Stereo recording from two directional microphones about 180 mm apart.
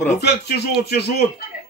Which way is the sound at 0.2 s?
65° left (ahead or behind).